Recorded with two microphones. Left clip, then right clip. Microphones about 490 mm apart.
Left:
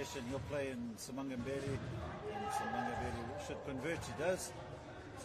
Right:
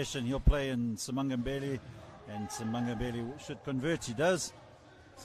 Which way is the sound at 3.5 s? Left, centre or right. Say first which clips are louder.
Right 9 dB; right.